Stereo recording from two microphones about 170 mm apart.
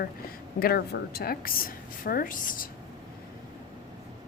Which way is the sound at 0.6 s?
65° left (ahead or behind).